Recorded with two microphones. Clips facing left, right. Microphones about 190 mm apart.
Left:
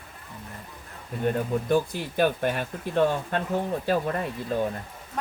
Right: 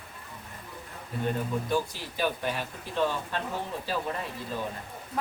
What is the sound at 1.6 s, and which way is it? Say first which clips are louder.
Speech: left 5 dB; 55° left (ahead or behind).